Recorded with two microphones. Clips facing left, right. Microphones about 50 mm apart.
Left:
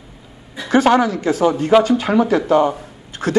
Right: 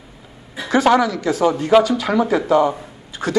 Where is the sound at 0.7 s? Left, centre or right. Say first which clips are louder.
Left 1 dB; left.